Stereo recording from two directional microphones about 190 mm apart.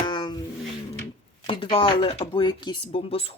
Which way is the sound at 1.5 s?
25° left (ahead or behind).